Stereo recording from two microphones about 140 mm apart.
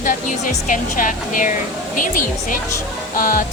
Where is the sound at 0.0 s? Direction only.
70° left (ahead or behind).